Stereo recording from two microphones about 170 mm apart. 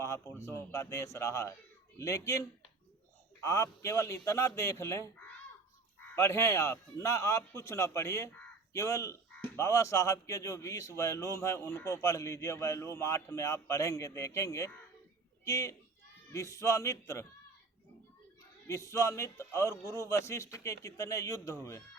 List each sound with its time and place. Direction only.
0.0 s speech: 15° left (ahead or behind)
3.4 s speech: 15° left (ahead or behind)
18.7 s speech: 20° left (ahead or behind)